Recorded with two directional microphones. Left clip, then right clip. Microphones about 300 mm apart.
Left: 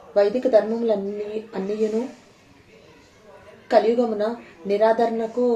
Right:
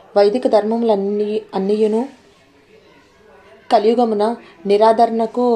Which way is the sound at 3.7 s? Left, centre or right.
Right.